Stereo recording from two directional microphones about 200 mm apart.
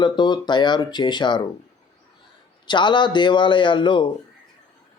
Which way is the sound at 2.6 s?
25° left (ahead or behind).